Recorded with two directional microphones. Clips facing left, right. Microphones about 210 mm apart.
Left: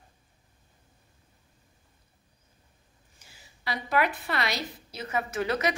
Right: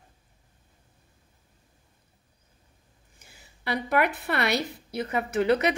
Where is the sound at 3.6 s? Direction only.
60° right (ahead or behind).